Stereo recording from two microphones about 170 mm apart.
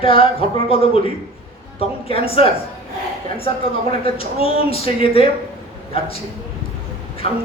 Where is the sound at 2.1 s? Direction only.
35° left (ahead or behind).